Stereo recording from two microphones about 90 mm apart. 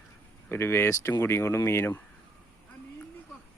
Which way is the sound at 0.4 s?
25° left (ahead or behind).